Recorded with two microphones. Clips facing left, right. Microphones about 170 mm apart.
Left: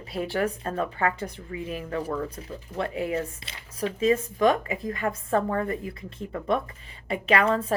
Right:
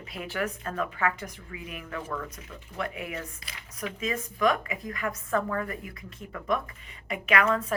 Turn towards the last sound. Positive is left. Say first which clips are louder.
# left 3 dB
turn(degrees=30)  # may be behind; listen again after turning